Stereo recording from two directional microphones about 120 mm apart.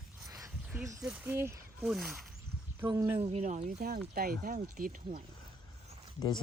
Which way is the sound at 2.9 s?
30° right (ahead or behind).